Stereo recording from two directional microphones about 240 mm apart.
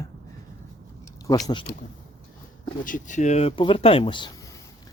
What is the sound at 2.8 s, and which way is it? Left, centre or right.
Speech, left.